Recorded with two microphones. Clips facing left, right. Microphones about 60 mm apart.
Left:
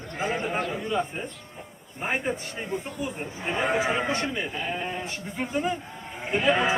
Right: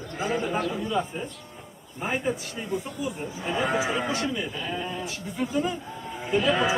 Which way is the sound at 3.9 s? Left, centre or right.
Left.